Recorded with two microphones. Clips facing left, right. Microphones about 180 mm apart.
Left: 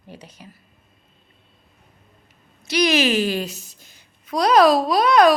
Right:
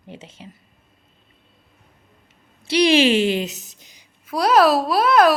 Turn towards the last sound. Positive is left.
turn(degrees=-5)  # may be behind; listen again after turning